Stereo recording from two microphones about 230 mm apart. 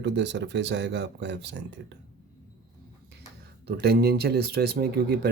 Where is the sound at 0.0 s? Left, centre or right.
Right.